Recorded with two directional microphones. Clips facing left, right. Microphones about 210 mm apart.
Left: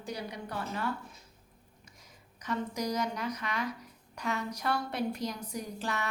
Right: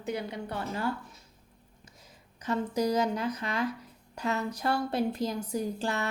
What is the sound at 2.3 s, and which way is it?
A woman's voice, 30° right (ahead or behind).